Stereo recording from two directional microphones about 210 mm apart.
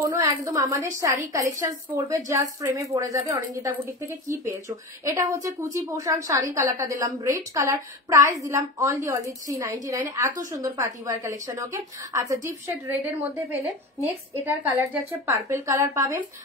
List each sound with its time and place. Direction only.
0.0 s a woman's voice: 15° right (ahead or behind)
14.3 s a woman's voice: 10° right (ahead or behind)